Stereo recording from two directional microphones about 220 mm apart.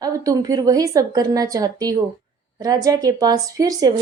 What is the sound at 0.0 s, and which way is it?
A woman's voice, 15° right (ahead or behind).